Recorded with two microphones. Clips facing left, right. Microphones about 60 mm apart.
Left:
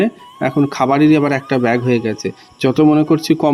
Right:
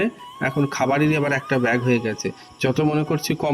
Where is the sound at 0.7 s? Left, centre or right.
Left.